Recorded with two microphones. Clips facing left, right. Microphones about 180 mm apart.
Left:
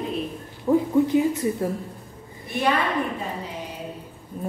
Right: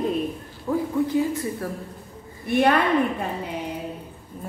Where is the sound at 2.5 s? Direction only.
60° right (ahead or behind).